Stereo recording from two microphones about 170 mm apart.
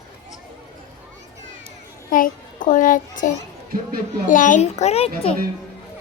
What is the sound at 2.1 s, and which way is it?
A child's voice, 55° left (ahead or behind).